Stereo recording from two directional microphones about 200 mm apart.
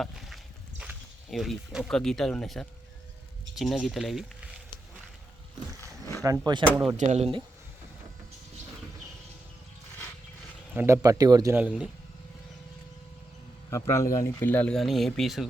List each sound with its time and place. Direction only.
0.0 s a sound: centre (ahead or behind)
0.8 s speech: 5° right (ahead or behind)
6.2 s speech: 20° right (ahead or behind)
6.9 s speech: 35° right (ahead or behind)
10.8 s speech: 10° right (ahead or behind)
11.6 s speech: 5° right (ahead or behind)
13.7 s speech: 15° left (ahead or behind)